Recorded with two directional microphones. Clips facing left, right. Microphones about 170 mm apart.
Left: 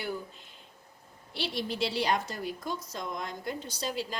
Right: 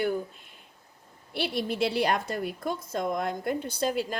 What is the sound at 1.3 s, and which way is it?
A woman's voice, 55° right (ahead or behind).